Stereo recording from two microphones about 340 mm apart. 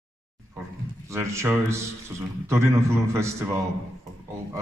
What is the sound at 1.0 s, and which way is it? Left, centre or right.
A man's voice, centre.